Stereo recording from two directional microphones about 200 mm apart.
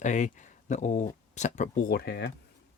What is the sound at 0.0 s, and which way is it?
Speech, 40° left (ahead or behind).